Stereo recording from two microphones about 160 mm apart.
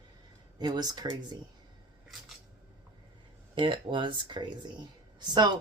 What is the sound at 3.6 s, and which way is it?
Speech, 30° right (ahead or behind).